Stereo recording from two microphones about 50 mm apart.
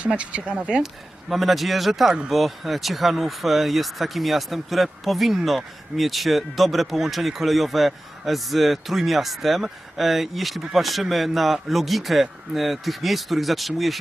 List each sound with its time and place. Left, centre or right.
0.2 s speech: right
1.3 s speech: centre